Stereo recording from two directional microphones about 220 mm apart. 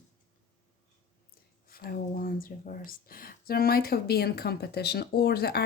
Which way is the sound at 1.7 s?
40° left (ahead or behind).